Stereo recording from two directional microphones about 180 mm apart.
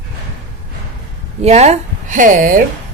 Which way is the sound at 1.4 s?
35° right (ahead or behind).